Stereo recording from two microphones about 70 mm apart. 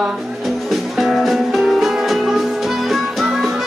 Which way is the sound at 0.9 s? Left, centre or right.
Centre.